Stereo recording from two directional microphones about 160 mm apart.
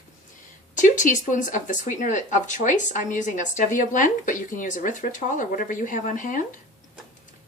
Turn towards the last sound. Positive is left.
turn(degrees=55)  # may be behind; listen again after turning